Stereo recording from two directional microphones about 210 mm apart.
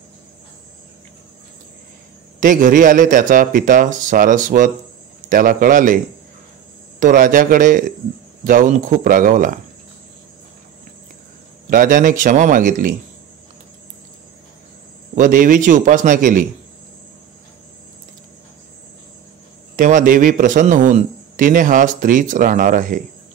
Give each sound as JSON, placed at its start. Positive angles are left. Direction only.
{"t": 2.4, "sound": "a man's voice", "side_deg": -40}
{"t": 7.0, "sound": "a man's voice", "side_deg": -40}
{"t": 11.7, "sound": "a man's voice", "side_deg": -40}
{"t": 15.1, "sound": "a man's voice", "side_deg": -40}
{"t": 19.7, "sound": "a man's voice", "side_deg": -40}